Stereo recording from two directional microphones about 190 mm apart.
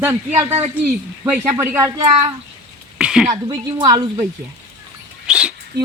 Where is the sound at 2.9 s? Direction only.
5° right (ahead or behind).